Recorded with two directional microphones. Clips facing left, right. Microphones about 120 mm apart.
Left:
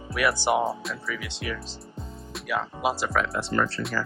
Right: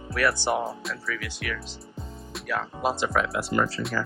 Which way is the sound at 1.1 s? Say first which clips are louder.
Left 1 dB; 25° left (ahead or behind).